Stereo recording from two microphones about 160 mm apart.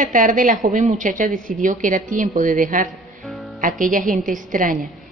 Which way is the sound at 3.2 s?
Centre (ahead or behind).